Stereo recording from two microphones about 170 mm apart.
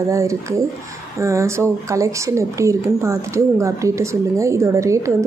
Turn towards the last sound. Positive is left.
turn(degrees=-15)  # may be behind; listen again after turning